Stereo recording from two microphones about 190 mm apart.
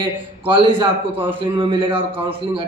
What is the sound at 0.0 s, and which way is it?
A man's voice, 25° right (ahead or behind).